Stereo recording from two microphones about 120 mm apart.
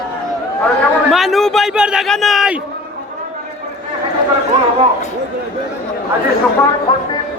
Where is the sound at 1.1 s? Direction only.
Centre (ahead or behind).